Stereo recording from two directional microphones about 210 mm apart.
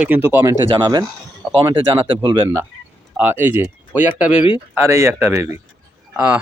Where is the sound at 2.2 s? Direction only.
20° right (ahead or behind).